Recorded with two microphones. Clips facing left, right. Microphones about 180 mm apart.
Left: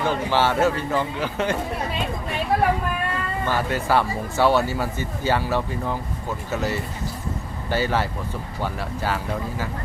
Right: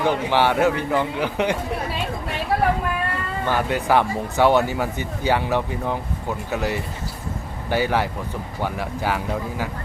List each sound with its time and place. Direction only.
0.0 s speech: 15° right (ahead or behind)
3.5 s speech: 15° right (ahead or behind)